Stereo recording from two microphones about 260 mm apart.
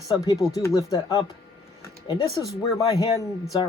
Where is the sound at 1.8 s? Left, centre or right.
Centre.